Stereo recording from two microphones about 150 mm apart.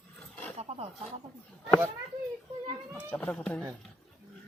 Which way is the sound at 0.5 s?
40° right (ahead or behind).